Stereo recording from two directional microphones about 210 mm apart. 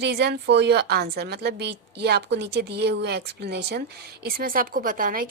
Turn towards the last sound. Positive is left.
turn(degrees=-40)  # may be behind; listen again after turning